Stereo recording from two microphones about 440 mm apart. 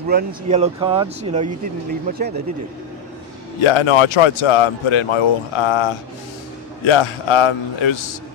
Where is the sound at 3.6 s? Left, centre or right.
Left.